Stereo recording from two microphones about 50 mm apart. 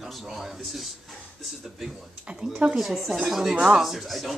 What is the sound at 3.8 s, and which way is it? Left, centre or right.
Speech, centre.